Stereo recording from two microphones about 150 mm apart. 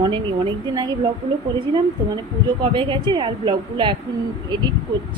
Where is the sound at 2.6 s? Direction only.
35° right (ahead or behind).